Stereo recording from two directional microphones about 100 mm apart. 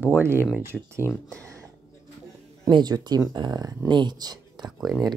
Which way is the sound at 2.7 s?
45° right (ahead or behind).